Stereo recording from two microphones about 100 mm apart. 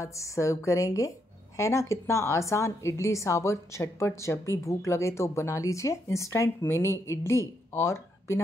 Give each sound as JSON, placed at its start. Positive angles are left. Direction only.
{"t": 0.0, "sound": "a woman's voice", "side_deg": 30}